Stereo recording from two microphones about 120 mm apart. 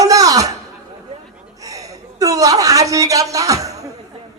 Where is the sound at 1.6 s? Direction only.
30° right (ahead or behind).